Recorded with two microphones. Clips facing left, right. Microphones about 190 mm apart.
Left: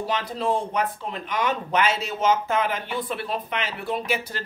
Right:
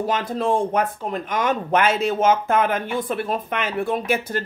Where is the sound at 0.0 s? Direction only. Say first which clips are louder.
Right 4 dB; 50° right (ahead or behind).